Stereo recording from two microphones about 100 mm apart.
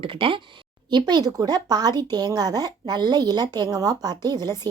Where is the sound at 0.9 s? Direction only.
50° right (ahead or behind).